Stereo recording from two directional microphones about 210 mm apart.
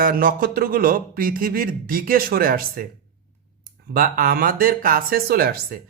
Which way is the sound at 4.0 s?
45° right (ahead or behind).